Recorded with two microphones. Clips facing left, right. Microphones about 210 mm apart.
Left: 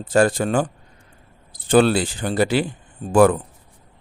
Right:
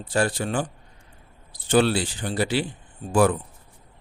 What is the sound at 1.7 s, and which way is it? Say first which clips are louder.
Speech: left 4 dB; 50° left (ahead or behind).